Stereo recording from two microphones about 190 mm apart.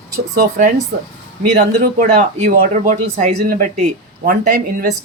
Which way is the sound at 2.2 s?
40° right (ahead or behind).